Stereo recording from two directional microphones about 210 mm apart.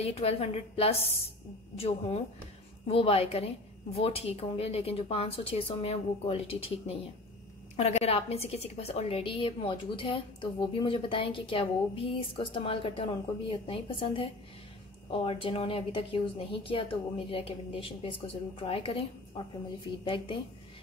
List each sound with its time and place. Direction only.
0.0 s a woman's voice: 30° left (ahead or behind)